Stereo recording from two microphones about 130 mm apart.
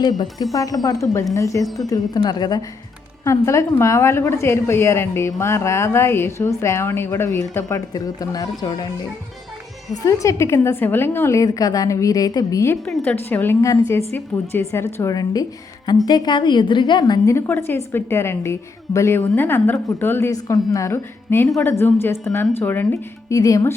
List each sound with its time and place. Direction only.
0.0 s a woman's voice: 30° left (ahead or behind)
1.6 s speech: centre (ahead or behind)
1.9 s a woman's voice: 30° left (ahead or behind)
10.0 s a woman's voice: 25° left (ahead or behind)
12.8 s a woman's voice: 10° left (ahead or behind); by 17.3 s 35° left (ahead or behind)
17.3 s a woman's voice: 20° left (ahead or behind)